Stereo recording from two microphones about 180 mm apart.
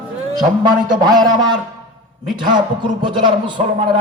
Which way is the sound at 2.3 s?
25° right (ahead or behind).